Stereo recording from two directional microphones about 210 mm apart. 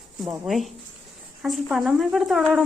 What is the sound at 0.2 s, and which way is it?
Speech, centre (ahead or behind).